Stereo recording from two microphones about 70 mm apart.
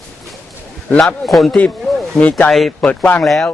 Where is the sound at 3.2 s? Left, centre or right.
Centre.